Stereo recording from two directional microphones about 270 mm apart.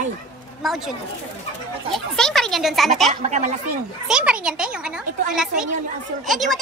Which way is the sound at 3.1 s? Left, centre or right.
Right.